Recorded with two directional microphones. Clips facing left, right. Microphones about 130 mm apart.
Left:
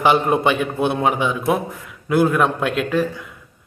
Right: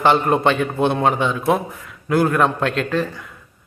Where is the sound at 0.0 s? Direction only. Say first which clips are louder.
Even; 10° left (ahead or behind).